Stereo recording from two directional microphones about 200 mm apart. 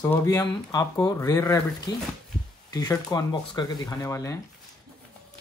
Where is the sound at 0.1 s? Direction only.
20° left (ahead or behind).